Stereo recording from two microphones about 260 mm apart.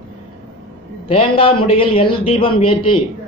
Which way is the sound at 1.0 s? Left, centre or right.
Left.